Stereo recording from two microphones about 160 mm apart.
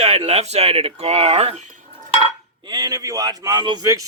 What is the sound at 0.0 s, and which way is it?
Speech, 45° right (ahead or behind).